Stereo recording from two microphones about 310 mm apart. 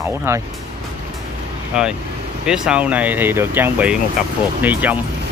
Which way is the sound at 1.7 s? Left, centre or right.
Centre.